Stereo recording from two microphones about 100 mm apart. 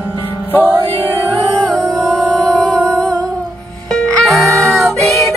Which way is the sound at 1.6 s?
5° left (ahead or behind).